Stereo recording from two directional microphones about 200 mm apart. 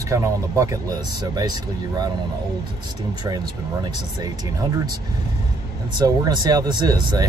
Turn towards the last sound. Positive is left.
turn(degrees=-20)  # may be behind; listen again after turning